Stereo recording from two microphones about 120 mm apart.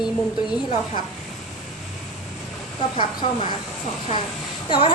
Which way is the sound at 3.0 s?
45° left (ahead or behind).